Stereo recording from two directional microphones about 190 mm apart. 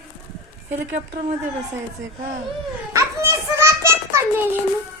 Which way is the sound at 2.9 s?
15° right (ahead or behind).